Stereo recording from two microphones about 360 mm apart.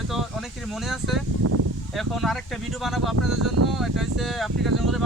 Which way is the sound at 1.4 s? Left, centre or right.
Right.